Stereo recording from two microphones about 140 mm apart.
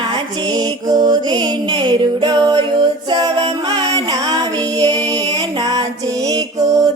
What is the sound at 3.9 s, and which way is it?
Music, 25° right (ahead or behind).